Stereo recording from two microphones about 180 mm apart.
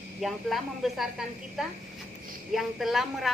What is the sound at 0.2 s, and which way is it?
A woman's voice, centre (ahead or behind).